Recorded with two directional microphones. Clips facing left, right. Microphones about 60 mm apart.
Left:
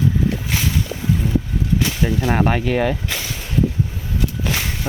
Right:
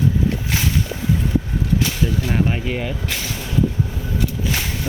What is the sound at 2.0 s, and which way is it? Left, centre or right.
Speech, left.